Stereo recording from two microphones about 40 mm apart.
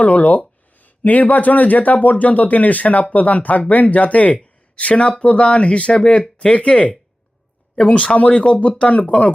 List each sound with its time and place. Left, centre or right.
0.0 s speech: left